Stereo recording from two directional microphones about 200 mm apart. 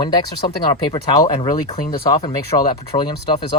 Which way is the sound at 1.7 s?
45° left (ahead or behind).